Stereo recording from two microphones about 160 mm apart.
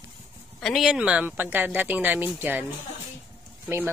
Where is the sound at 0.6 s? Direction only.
Centre (ahead or behind).